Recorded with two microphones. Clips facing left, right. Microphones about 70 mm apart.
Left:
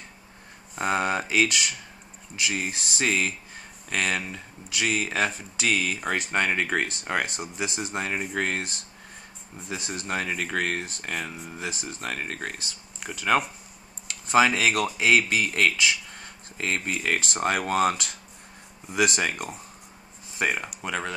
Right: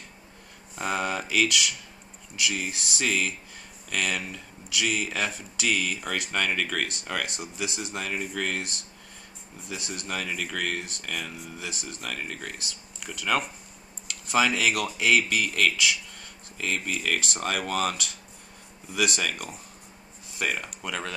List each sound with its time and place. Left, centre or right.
0.7 s speech: left
20.3 s speech: left